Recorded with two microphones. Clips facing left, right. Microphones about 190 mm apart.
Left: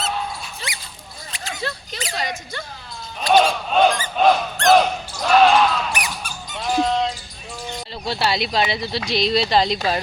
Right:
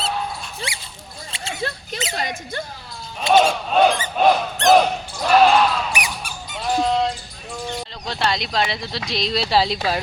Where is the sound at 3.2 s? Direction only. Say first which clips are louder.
Even; 25° right (ahead or behind).